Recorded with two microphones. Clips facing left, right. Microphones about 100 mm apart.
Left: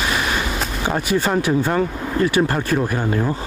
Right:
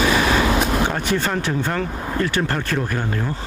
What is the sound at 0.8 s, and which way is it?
Speech, 10° left (ahead or behind).